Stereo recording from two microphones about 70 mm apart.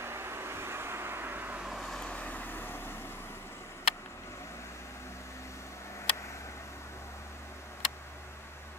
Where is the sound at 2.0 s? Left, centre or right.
Centre; by 3.4 s left.